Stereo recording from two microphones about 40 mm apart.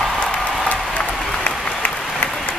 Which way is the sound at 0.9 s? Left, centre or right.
Left.